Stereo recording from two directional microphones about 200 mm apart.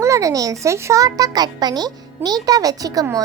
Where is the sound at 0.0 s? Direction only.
15° right (ahead or behind).